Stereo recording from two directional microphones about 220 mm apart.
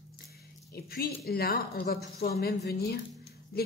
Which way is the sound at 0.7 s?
45° left (ahead or behind).